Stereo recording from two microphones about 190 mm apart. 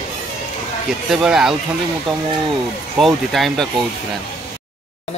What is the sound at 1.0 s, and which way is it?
Speech, centre (ahead or behind).